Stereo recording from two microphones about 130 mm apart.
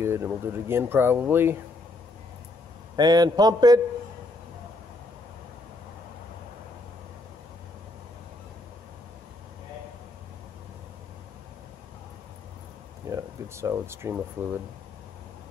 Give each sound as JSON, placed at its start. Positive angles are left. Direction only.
{"t": 0.0, "sound": "speech", "side_deg": -20}
{"t": 3.0, "sound": "a man's voice", "side_deg": -30}
{"t": 13.1, "sound": "speech", "side_deg": -20}